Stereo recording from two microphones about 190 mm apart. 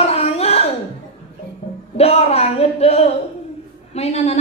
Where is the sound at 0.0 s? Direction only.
30° left (ahead or behind).